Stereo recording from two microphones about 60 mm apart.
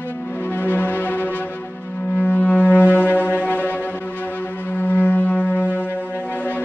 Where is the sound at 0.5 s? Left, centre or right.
Left.